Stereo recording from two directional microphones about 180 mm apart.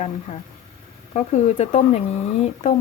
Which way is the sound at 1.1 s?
40° left (ahead or behind).